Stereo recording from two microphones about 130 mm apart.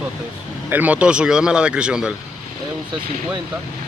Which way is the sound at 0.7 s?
10° right (ahead or behind).